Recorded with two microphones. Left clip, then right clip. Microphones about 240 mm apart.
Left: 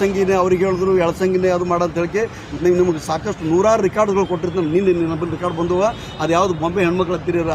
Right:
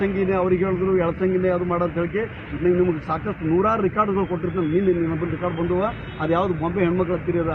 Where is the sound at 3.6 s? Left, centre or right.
Left.